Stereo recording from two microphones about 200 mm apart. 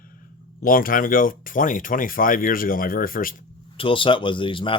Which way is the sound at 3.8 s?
25° left (ahead or behind).